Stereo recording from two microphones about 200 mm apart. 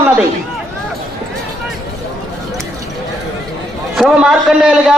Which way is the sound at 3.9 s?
5° right (ahead or behind).